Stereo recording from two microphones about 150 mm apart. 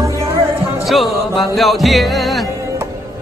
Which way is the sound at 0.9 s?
Centre (ahead or behind).